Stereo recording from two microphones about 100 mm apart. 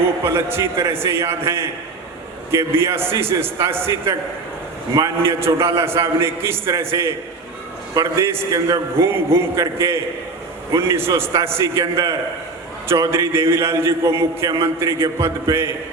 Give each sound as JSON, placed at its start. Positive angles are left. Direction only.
{"t": 0.2, "sound": "a man's voice", "side_deg": -25}